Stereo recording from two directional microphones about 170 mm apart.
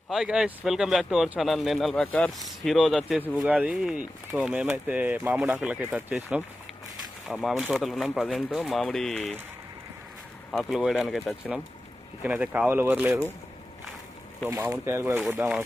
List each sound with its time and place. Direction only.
0.1 s speech: 5° right (ahead or behind)
10.5 s speech: centre (ahead or behind)
14.5 s speech: 15° right (ahead or behind)